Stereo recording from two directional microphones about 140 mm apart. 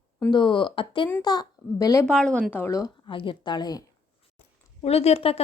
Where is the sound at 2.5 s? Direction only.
20° left (ahead or behind).